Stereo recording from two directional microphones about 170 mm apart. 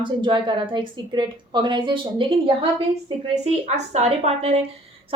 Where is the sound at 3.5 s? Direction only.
40° right (ahead or behind).